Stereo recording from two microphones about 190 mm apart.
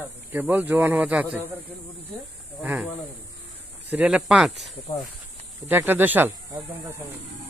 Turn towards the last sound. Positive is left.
turn(degrees=-15)  # may be behind; listen again after turning